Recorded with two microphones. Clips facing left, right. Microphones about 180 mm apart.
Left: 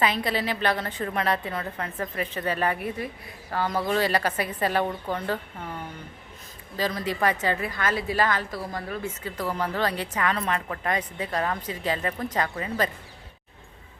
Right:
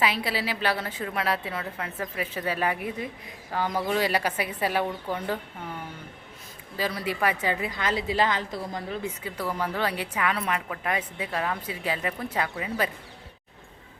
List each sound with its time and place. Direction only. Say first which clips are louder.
0.0 s a woman's voice: left 2 dB; 5° right (ahead or behind)
6.7 s a woman's voice: left 1 dB; 10° right (ahead or behind)